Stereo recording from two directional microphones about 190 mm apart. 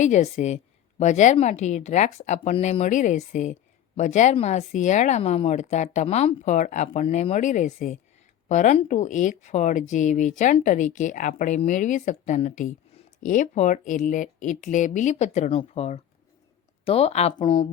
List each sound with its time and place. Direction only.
0.0 s a woman's voice: 40° left (ahead or behind)